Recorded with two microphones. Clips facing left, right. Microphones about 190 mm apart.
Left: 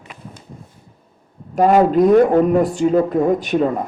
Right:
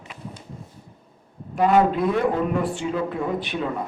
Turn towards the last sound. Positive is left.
turn(degrees=45)  # may be behind; listen again after turning